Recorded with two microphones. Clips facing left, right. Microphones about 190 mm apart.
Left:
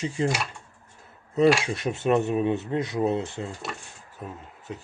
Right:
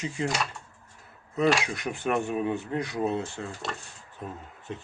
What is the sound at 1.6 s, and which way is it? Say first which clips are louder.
Speech: left 4 dB; 25° left (ahead or behind).